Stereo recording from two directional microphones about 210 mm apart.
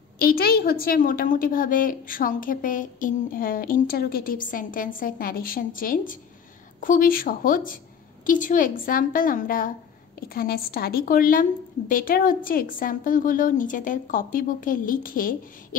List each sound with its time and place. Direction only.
0.2 s a woman's voice: 45° left (ahead or behind)